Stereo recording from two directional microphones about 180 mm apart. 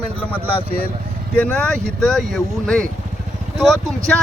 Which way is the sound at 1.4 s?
5° left (ahead or behind).